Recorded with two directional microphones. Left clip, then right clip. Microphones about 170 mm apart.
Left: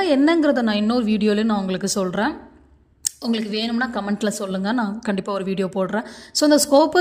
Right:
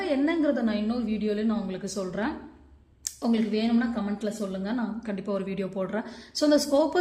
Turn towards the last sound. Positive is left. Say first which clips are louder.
# left 7 dB
turn(degrees=30)  # may be behind; listen again after turning